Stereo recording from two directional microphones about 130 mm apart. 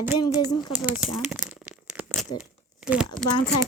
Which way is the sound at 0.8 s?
5° right (ahead or behind).